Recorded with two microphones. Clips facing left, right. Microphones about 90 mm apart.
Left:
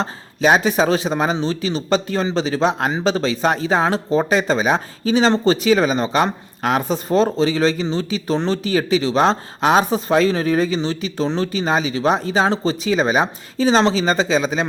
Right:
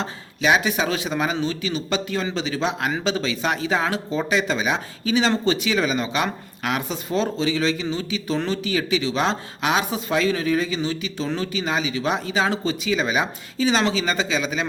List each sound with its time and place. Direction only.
0.0 s speech: 35° left (ahead or behind)